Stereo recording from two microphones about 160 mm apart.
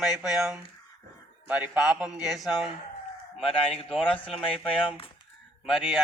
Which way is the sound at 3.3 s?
35° left (ahead or behind).